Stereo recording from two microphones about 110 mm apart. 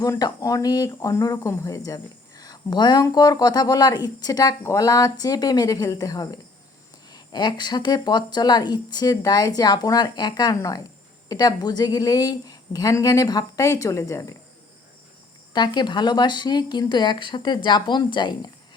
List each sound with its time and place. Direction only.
0.0 s speech: 35° left (ahead or behind)
15.5 s a woman's voice: 40° left (ahead or behind)